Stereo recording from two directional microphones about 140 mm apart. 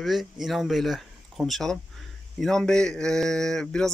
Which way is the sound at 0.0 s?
Centre (ahead or behind).